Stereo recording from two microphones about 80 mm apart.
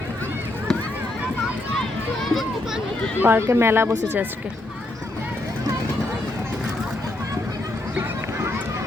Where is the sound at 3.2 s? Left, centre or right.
Right.